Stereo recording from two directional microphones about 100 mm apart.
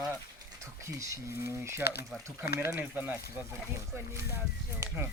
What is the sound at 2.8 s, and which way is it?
Speech, 15° right (ahead or behind).